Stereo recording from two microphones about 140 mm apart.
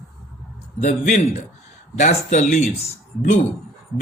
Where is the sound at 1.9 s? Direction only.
60° left (ahead or behind).